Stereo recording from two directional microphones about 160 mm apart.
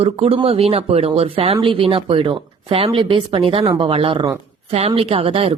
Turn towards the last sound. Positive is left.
turn(degrees=-35)  # may be behind; listen again after turning